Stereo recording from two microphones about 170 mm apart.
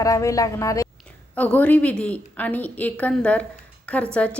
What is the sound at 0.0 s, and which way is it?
Speech, 20° left (ahead or behind).